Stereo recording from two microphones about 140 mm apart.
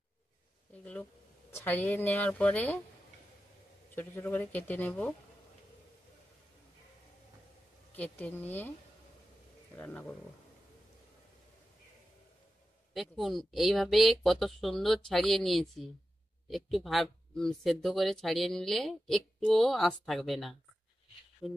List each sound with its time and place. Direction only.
1.5 s a woman's voice: 15° left (ahead or behind)
3.9 s a woman's voice: 15° left (ahead or behind)
7.9 s a woman's voice: 10° left (ahead or behind)
9.8 s a woman's voice: 10° left (ahead or behind)
12.9 s speech: centre (ahead or behind)